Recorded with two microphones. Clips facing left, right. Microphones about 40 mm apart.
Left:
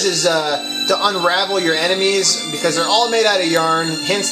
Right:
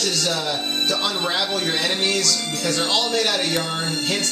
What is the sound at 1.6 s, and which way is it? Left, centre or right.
Speech, left.